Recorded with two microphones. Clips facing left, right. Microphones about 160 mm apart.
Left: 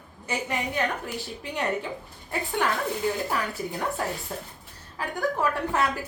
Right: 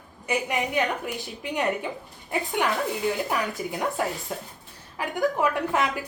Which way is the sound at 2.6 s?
15° right (ahead or behind).